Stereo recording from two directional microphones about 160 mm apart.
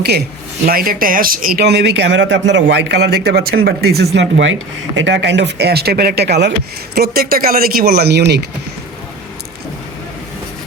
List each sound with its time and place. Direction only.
0.6 s speech: 65° right (ahead or behind); by 6.5 s 90° right
6.9 s speech: 75° right (ahead or behind); by 8.4 s 90° right